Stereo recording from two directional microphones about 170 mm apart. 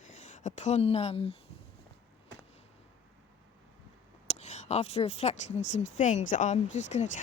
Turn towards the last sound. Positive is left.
turn(degrees=45)  # may be behind; listen again after turning